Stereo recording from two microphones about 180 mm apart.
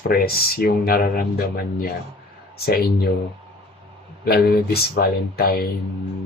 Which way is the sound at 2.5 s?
55° left (ahead or behind).